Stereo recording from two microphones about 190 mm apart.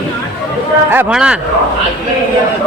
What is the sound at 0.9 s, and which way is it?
Speech, 10° right (ahead or behind).